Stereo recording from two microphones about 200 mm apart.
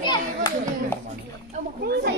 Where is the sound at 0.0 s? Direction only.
20° left (ahead or behind).